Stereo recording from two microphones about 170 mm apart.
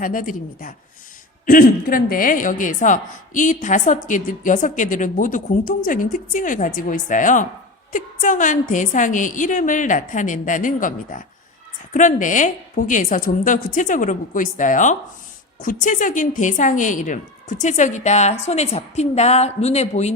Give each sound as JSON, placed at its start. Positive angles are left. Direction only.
{"t": 0.0, "sound": "a woman's voice", "side_deg": 50}